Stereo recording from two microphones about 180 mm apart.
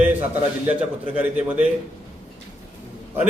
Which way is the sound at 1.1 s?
10° right (ahead or behind).